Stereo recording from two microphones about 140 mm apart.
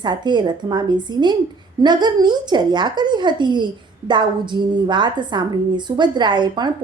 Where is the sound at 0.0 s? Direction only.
30° right (ahead or behind).